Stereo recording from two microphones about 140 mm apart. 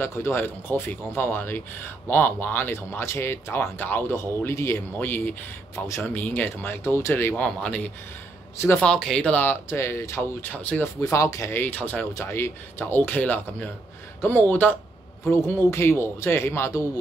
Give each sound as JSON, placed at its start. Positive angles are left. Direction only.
{"t": 0.0, "sound": "speech", "side_deg": 20}
{"t": 8.8, "sound": "speech", "side_deg": 5}